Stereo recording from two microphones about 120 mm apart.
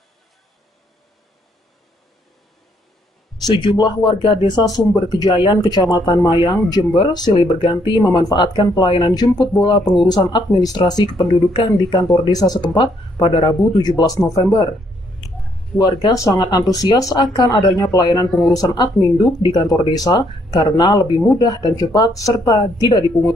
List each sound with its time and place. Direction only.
3.4 s speech: 35° left (ahead or behind)
15.8 s speech: 30° left (ahead or behind)